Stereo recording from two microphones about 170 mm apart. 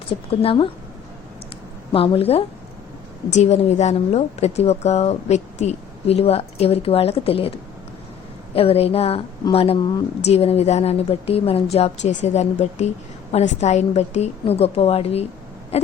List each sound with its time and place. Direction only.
0.1 s a woman's voice: 35° left (ahead or behind)
1.9 s a woman's voice: 35° left (ahead or behind)
8.5 s a woman's voice: 35° left (ahead or behind)
15.7 s owl: 35° left (ahead or behind)